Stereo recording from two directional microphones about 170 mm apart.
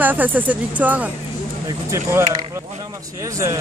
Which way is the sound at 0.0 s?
10° right (ahead or behind).